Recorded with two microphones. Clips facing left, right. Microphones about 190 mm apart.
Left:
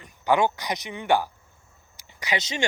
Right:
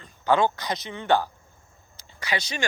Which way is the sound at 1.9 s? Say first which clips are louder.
Left 1 dB; 20° left (ahead or behind).